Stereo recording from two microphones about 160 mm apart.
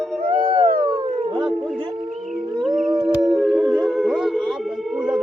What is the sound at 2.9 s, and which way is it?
Howl, 25° right (ahead or behind).